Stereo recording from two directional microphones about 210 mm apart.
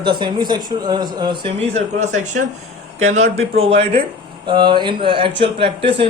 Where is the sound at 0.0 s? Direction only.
20° right (ahead or behind).